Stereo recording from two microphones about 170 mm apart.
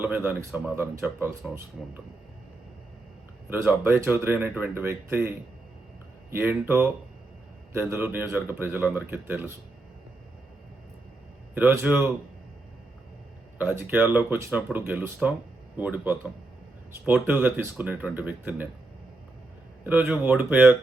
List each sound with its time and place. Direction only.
0.0 s speech: 10° right (ahead or behind)
3.5 s speech: 10° right (ahead or behind)
6.3 s speech: 15° right (ahead or behind)
11.5 s speech: 15° right (ahead or behind)
13.6 s speech: 10° right (ahead or behind)
19.8 s speech: 10° right (ahead or behind)